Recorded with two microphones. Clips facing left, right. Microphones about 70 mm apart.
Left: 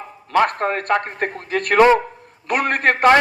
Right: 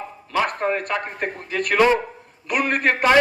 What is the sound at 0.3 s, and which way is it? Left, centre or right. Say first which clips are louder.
A man's voice: left 4 dB; left.